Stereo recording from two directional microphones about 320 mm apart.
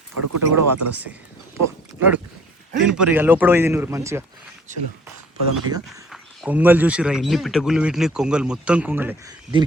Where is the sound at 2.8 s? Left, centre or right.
Centre.